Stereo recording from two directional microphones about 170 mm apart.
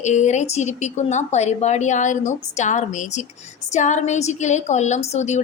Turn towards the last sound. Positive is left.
turn(degrees=40)  # may be behind; listen again after turning